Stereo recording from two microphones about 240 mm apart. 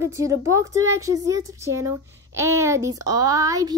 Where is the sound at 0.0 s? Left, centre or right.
Centre.